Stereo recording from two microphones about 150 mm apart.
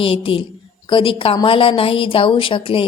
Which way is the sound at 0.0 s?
35° left (ahead or behind).